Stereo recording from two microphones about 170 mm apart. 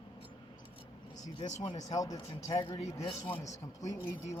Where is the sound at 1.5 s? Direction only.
45° left (ahead or behind).